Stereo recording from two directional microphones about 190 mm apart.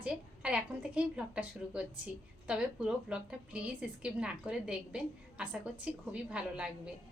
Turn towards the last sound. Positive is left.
turn(degrees=-5)  # may be behind; listen again after turning